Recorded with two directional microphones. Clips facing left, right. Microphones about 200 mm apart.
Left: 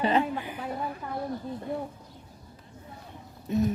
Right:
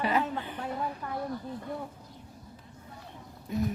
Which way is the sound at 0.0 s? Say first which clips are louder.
Left 4 dB; 30° left (ahead or behind).